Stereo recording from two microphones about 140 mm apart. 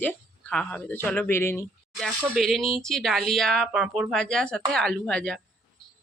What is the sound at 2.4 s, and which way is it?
Speech, centre (ahead or behind).